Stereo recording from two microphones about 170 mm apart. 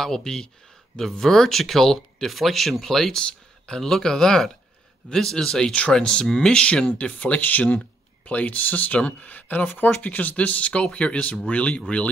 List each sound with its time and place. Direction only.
0.0 s speech: 5° left (ahead or behind)